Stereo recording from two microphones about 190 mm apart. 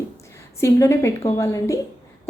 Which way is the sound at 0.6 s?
15° left (ahead or behind).